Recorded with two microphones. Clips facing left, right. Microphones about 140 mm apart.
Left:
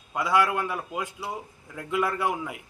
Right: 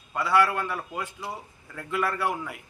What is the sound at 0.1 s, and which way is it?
A man's voice, 15° left (ahead or behind).